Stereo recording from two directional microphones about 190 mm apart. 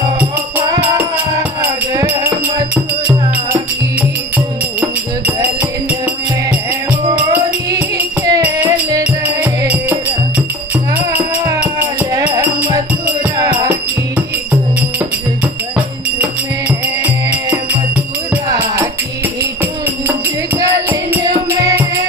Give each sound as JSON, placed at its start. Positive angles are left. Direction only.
{"t": 0.2, "sound": "music", "side_deg": -10}
{"t": 4.7, "sound": "music", "side_deg": -10}
{"t": 7.7, "sound": "music", "side_deg": -10}
{"t": 16.2, "sound": "music", "side_deg": -10}
{"t": 20.5, "sound": "music", "side_deg": -15}